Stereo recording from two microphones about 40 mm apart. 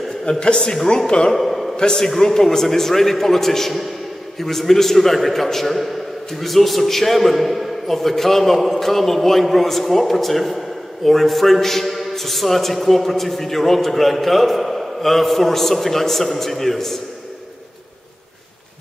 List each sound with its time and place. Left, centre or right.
0.2 s speech: left
1.3 s a sound: centre
1.8 s a man's voice: centre